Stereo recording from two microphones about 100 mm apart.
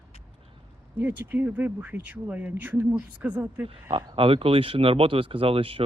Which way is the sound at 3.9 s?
65° right (ahead or behind).